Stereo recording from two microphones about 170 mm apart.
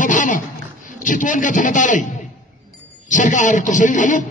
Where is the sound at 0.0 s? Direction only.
50° left (ahead or behind).